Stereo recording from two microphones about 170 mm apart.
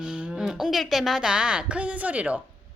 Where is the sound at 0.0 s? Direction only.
5° right (ahead or behind).